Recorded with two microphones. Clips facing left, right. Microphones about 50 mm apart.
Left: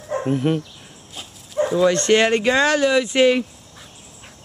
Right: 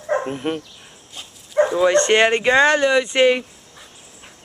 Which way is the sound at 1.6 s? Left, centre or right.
Right.